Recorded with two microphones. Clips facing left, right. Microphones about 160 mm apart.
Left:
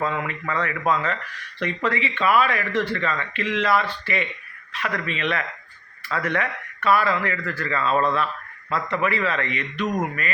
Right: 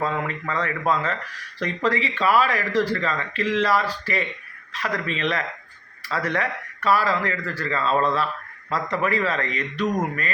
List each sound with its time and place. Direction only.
0.0 s speech: 35° right (ahead or behind)